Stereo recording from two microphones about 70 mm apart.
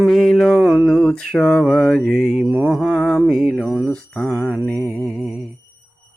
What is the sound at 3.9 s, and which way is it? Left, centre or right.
Mantra, centre.